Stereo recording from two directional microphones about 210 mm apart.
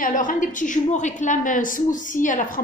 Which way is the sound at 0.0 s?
40° left (ahead or behind).